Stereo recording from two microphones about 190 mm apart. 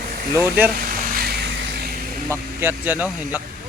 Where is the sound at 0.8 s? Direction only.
50° right (ahead or behind).